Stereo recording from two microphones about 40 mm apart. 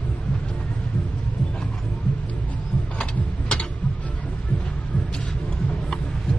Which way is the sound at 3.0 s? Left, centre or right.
Left.